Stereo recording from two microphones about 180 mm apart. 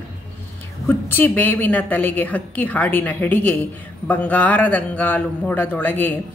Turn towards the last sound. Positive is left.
turn(degrees=10)  # may be behind; listen again after turning